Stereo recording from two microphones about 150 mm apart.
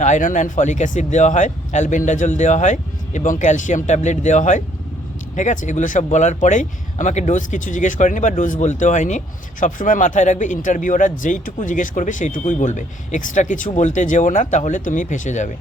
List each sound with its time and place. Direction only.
0.0 s speech: 60° left (ahead or behind)